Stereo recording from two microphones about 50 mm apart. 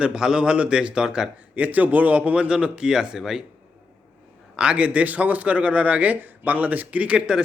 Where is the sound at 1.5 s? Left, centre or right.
Right; by 3.4 s centre.